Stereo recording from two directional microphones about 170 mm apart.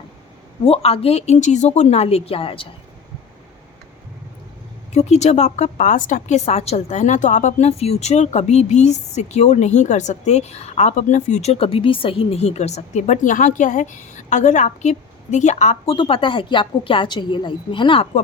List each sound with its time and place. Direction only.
0.6 s a woman's voice: 35° left (ahead or behind)
4.9 s a woman's voice: 40° left (ahead or behind)